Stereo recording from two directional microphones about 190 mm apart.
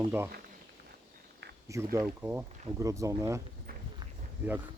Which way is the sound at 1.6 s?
15° right (ahead or behind).